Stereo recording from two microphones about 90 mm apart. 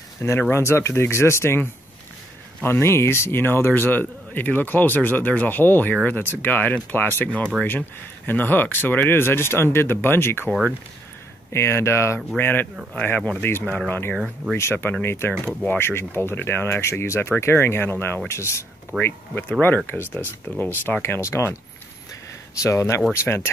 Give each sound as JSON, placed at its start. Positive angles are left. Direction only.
{"t": 0.2, "sound": "speech", "side_deg": 25}
{"t": 11.5, "sound": "speech", "side_deg": 30}
{"t": 14.1, "sound": "speech", "side_deg": 0}
{"t": 14.6, "sound": "speech", "side_deg": 25}
{"t": 22.6, "sound": "speech", "side_deg": 35}